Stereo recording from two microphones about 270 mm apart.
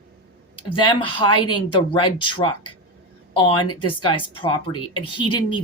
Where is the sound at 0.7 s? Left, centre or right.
Centre.